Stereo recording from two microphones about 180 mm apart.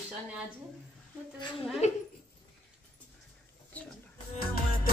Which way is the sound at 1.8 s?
35° left (ahead or behind).